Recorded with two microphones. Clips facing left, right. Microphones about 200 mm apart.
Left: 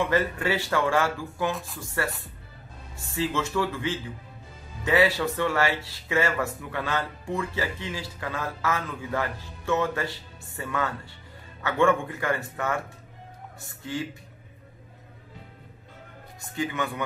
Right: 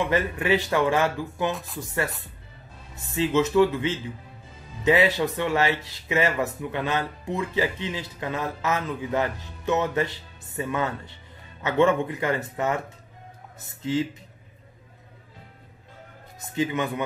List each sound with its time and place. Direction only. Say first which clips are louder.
0.1 s speech: right 2 dB; 20° right (ahead or behind)
1.5 s speech: right 1 dB; centre (ahead or behind)
3.2 s speech: right 7 dB; 20° right (ahead or behind)
16.3 s speech: right 4 dB; 20° right (ahead or behind)